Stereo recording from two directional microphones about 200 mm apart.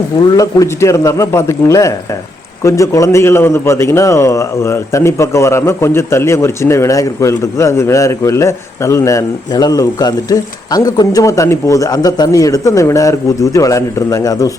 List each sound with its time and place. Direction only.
0.3 s a man's voice: 15° left (ahead or behind)